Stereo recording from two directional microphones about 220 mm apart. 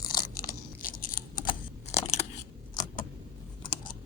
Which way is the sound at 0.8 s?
40° left (ahead or behind).